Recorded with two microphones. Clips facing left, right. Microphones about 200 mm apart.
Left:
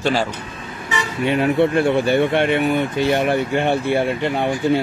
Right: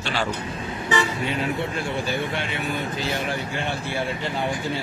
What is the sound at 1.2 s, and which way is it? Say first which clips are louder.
Speech: left 9 dB; 65° left (ahead or behind).